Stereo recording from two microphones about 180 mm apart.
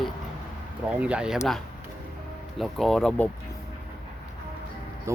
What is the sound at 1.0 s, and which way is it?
Speech, 5° right (ahead or behind).